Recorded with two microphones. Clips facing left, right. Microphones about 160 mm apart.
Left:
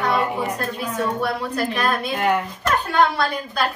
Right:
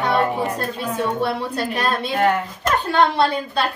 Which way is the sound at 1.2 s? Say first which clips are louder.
Right 1 dB; 30° right (ahead or behind).